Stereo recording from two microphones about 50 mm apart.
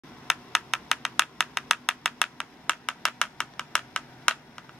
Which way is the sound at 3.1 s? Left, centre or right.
Centre.